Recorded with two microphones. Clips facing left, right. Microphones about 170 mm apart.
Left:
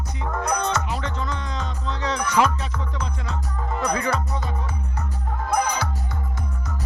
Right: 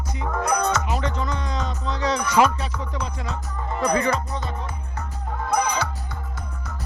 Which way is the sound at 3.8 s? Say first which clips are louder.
Right 3 dB; 5° left (ahead or behind).